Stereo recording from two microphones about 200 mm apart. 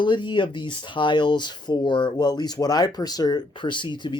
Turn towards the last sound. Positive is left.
turn(degrees=25)  # may be behind; listen again after turning